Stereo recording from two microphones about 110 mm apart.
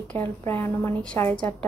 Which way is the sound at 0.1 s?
20° left (ahead or behind).